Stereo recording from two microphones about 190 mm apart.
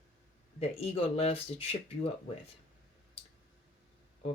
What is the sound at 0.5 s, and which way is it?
Speech, 35° left (ahead or behind).